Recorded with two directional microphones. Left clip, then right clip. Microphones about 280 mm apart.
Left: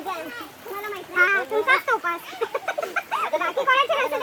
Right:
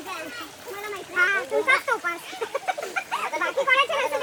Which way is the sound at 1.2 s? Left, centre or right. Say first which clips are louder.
Left 2 dB; left.